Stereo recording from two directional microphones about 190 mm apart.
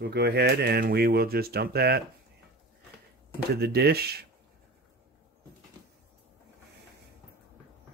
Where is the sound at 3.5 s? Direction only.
60° right (ahead or behind).